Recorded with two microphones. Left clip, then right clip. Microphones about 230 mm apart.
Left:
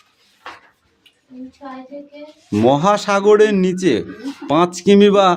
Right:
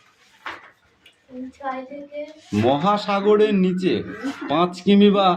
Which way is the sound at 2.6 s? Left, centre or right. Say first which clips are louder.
Left 5 dB; left.